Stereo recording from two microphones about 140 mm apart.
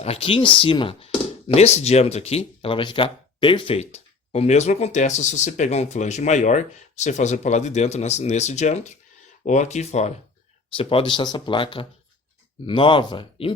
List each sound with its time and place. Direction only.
0.0 s speech: 45° left (ahead or behind)
10.8 s speech: 40° left (ahead or behind)